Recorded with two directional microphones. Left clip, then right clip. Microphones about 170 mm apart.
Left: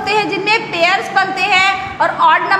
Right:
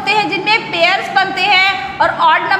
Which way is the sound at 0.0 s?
5° left (ahead or behind).